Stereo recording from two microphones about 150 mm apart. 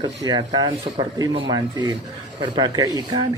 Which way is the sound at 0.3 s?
30° right (ahead or behind).